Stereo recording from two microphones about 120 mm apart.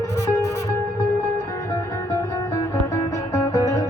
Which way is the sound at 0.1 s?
25° left (ahead or behind).